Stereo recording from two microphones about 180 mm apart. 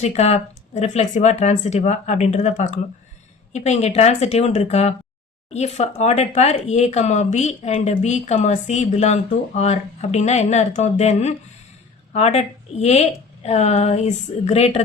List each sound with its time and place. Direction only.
0.0 s speech: 40° left (ahead or behind)